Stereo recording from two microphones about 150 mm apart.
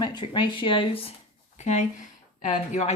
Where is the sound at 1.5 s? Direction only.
50° left (ahead or behind).